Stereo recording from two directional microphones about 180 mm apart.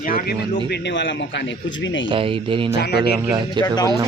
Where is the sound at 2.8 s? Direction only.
65° left (ahead or behind).